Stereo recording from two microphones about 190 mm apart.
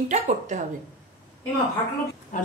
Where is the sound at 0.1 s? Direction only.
40° right (ahead or behind).